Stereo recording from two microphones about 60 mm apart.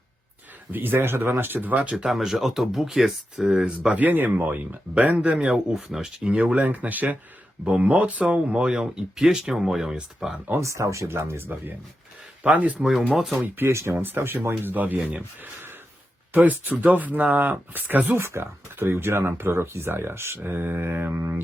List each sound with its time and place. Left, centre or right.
0.7 s speech: right
2.0 s speech: centre
3.8 s speech: right
4.9 s speech: right; by 10.3 s centre
10.3 s speech: right
10.6 s speech: right
12.4 s speech: right
12.9 s speech: centre
13.6 s speech: right
18.2 s speech: right